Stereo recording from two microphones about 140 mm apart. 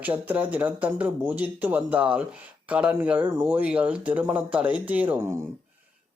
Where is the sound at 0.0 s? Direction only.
10° right (ahead or behind).